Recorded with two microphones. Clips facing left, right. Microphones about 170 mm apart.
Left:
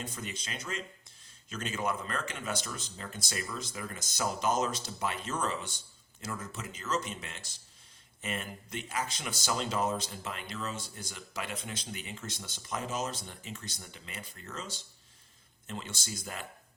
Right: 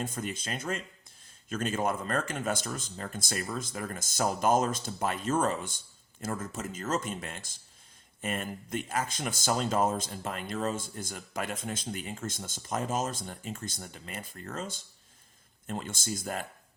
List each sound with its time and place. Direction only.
0.0 s speech: 50° right (ahead or behind)